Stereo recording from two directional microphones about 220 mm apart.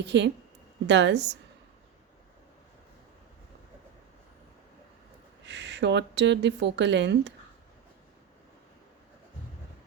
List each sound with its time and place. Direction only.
0.1 s a woman's voice: 55° right (ahead or behind)
5.5 s speech: 50° right (ahead or behind)